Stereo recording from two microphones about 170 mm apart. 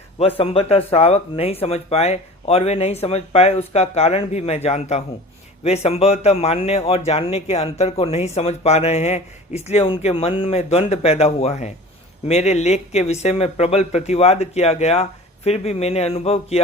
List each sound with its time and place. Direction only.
0.2 s speech: 35° left (ahead or behind)